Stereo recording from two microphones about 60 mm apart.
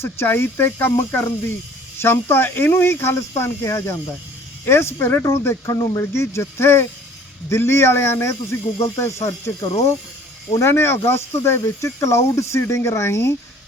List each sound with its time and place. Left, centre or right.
0.0 s speech: left
10.6 s speech: left